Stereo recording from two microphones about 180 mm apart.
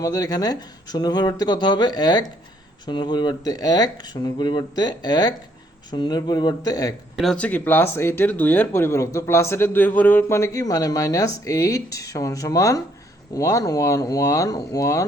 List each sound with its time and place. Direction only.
0.0 s speech: 20° left (ahead or behind)
7.2 s speech: 5° left (ahead or behind)